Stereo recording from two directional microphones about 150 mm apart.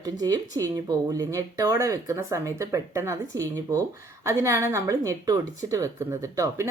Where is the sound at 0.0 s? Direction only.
25° right (ahead or behind).